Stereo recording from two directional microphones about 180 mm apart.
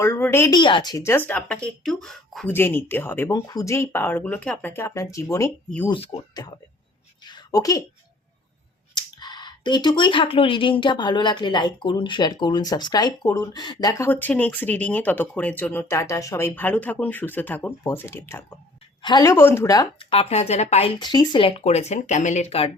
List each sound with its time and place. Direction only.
0.0 s speech: 15° left (ahead or behind)
2.5 s speech: 10° left (ahead or behind)
5.9 s speech: 30° left (ahead or behind)
7.3 s a sound: 20° left (ahead or behind)
9.0 s speech: 25° left (ahead or behind)
14.1 s speech: 10° left (ahead or behind); by 20.9 s 35° left (ahead or behind)
21.0 s speech: 25° left (ahead or behind)